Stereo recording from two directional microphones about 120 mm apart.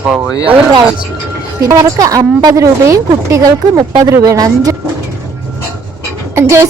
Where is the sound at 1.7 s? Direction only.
30° right (ahead or behind).